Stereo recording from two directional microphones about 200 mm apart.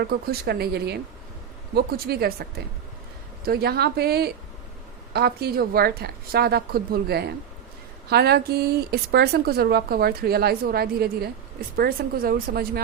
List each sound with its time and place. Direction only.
0.0 s speech: 50° right (ahead or behind)